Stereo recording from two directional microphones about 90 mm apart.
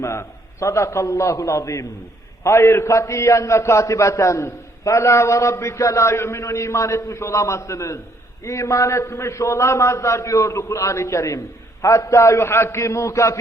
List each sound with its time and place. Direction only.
0.0 s a man's voice: 35° left (ahead or behind)